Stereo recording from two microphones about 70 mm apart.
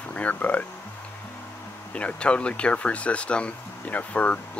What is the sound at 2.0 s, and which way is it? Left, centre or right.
Speech, centre.